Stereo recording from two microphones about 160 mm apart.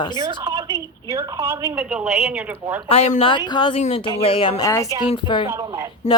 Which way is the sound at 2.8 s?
40° left (ahead or behind).